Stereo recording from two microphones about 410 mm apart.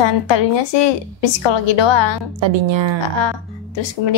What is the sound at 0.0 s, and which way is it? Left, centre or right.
A woman's voice, left.